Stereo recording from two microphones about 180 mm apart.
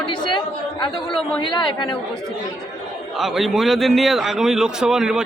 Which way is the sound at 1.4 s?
25° left (ahead or behind).